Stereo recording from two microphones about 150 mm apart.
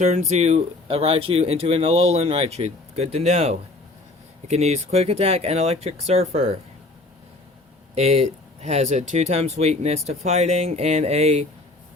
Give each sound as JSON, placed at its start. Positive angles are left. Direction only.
{"t": 0.0, "sound": "speech", "side_deg": -50}
{"t": 7.9, "sound": "speech", "side_deg": -45}